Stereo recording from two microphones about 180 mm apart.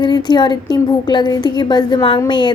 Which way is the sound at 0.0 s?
25° left (ahead or behind).